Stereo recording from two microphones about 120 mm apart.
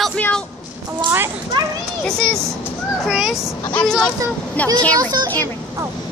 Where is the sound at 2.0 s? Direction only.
5° left (ahead or behind).